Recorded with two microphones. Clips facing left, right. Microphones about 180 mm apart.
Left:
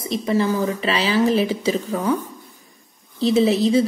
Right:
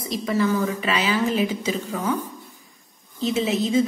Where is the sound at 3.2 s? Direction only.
35° left (ahead or behind).